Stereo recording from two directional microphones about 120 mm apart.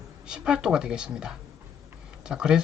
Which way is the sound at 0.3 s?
5° right (ahead or behind).